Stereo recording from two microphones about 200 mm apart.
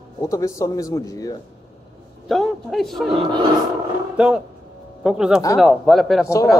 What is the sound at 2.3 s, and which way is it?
Speech, centre (ahead or behind).